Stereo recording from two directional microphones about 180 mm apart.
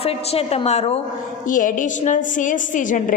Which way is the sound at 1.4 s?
45° left (ahead or behind).